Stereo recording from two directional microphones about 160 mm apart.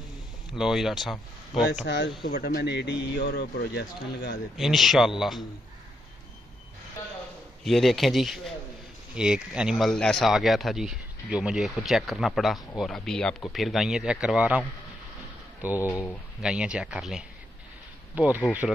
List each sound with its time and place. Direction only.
0.5 s speech: centre (ahead or behind)
1.9 s a man's voice: 90° left
4.6 s speech: centre (ahead or behind)
7.6 s speech: centre (ahead or behind)
15.6 s speech: 10° right (ahead or behind)
15.9 s speech: 20° left (ahead or behind)
16.3 s speech: 5° right (ahead or behind)